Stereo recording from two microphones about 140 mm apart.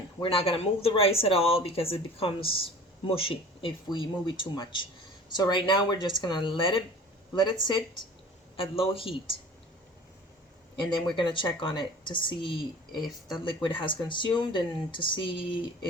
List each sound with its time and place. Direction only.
0.2 s speech: 40° left (ahead or behind)
11.1 s speech: 35° left (ahead or behind)